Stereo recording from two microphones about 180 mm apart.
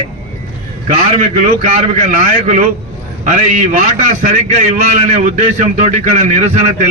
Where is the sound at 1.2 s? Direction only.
40° right (ahead or behind).